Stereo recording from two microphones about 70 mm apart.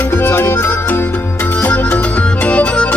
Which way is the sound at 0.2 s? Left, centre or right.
Left.